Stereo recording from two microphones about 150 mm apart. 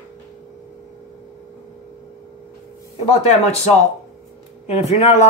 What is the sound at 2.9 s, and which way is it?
Speech, 45° left (ahead or behind).